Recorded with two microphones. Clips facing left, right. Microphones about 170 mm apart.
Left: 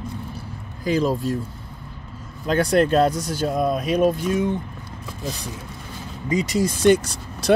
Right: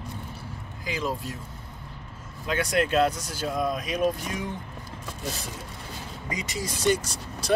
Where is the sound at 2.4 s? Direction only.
35° left (ahead or behind).